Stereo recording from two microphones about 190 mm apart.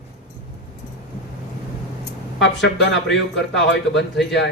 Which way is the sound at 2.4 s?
70° left (ahead or behind).